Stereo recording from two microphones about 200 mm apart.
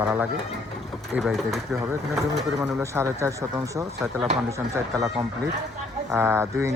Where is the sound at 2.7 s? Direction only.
10° right (ahead or behind).